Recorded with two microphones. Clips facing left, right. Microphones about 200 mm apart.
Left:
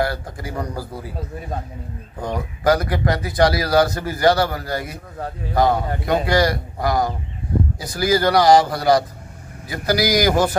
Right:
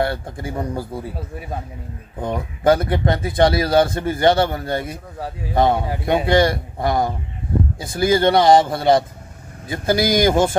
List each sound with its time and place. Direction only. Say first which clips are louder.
0.0 s a man's voice: right 1 dB; 25° right (ahead or behind)
2.6 s a man's voice: right 2 dB; 25° right (ahead or behind)